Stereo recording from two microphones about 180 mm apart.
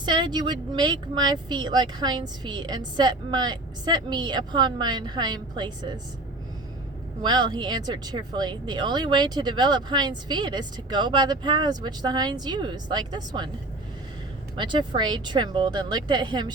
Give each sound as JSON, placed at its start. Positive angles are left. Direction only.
{"t": 0.0, "sound": "speech", "side_deg": -25}
{"t": 7.2, "sound": "speech", "side_deg": -25}
{"t": 14.5, "sound": "speech", "side_deg": -25}